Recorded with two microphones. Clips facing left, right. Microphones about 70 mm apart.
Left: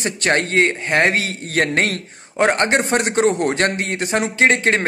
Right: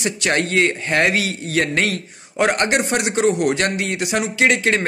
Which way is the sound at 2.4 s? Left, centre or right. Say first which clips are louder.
Left 1 dB; left.